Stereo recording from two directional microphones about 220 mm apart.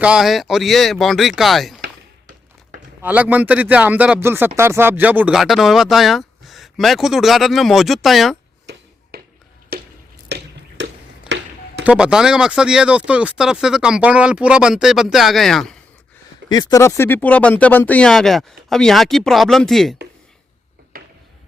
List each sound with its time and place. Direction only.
0.0 s speech: 5° right (ahead or behind)
3.0 s speech: 5° right (ahead or behind)
9.1 s a sound: 45° right (ahead or behind)
10.2 s drip: 50° right (ahead or behind)
11.9 s speech: 5° right (ahead or behind)
16.5 s speech: 15° left (ahead or behind); by 20.0 s centre (ahead or behind)
20.9 s a sound: 40° right (ahead or behind)